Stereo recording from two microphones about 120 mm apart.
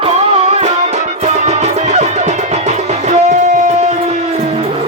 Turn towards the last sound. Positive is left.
turn(degrees=-70)  # may be behind; listen again after turning